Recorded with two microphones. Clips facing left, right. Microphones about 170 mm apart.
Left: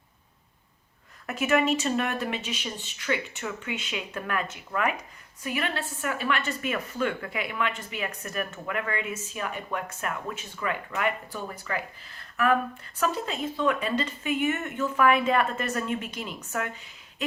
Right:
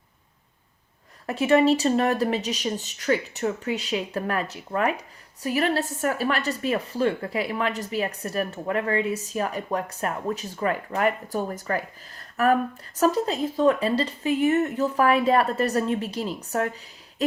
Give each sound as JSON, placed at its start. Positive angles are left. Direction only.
{"t": 1.3, "sound": "speech", "side_deg": -30}